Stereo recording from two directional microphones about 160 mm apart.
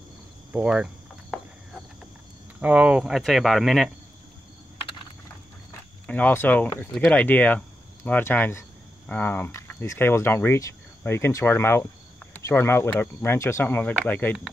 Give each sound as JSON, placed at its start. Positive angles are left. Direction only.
{"t": 0.5, "sound": "speech", "side_deg": -5}
{"t": 2.6, "sound": "cricket", "side_deg": -5}
{"t": 6.0, "sound": "speech", "side_deg": 10}